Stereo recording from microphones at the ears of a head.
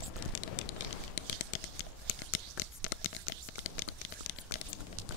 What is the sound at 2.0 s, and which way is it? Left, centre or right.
Tearing, left.